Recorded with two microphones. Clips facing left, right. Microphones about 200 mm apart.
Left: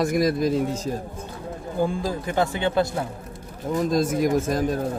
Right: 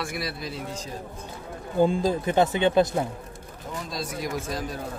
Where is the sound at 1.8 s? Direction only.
20° right (ahead or behind).